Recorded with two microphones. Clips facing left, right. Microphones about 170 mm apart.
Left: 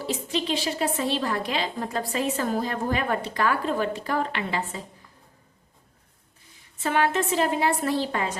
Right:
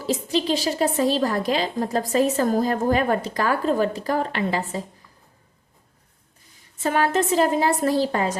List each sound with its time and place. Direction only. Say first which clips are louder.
0.0 s a woman's voice: right 5 dB; 40° right (ahead or behind)
6.8 s a woman's voice: right 3 dB; 40° right (ahead or behind)